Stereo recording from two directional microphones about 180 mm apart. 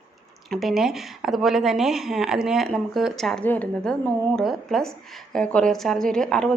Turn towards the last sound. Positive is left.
turn(degrees=5)  # may be behind; listen again after turning